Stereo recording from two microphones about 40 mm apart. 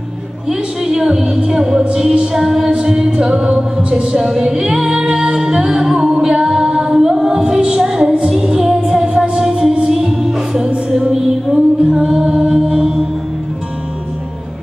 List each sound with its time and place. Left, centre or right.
0.5 s music: centre
5.0 s a capella: right
8.3 s music: centre